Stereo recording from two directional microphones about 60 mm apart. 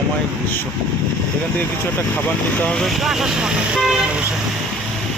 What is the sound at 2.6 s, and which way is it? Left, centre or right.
Speech, centre.